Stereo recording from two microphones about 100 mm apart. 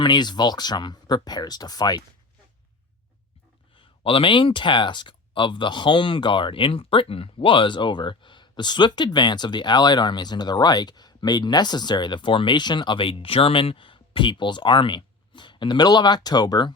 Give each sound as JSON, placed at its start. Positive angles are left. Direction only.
{"t": 0.0, "sound": "speech", "side_deg": 45}
{"t": 3.8, "sound": "speech", "side_deg": 60}